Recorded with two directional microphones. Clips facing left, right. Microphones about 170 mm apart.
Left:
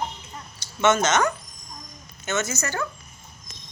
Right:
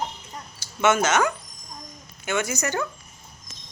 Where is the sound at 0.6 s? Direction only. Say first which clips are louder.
Even; 10° right (ahead or behind).